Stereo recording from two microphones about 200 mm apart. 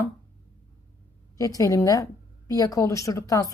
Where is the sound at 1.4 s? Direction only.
15° left (ahead or behind).